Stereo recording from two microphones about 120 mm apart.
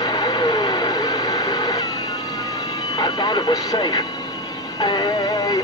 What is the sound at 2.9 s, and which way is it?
Speech, 35° left (ahead or behind).